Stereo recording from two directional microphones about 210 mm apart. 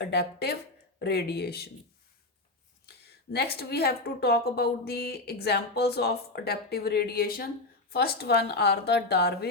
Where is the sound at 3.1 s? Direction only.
50° left (ahead or behind).